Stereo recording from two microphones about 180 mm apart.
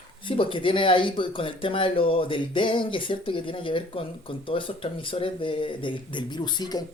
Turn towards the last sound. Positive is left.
turn(degrees=25)  # may be behind; listen again after turning